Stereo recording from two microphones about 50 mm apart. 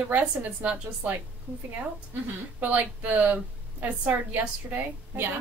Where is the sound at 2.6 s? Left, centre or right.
Right.